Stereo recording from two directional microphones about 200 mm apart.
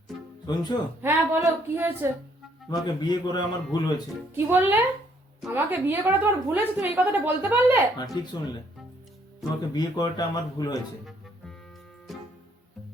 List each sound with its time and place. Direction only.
0.4 s a man's voice: 20° left (ahead or behind)
1.0 s a woman's voice: 15° right (ahead or behind)
2.8 s a man's voice: 20° left (ahead or behind)
4.4 s a woman's voice: 10° right (ahead or behind)
7.9 s a man's voice: 20° left (ahead or behind)
9.7 s a man's voice: 20° left (ahead or behind)